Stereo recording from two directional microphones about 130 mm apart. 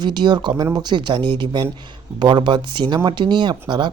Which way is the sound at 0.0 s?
35° right (ahead or behind).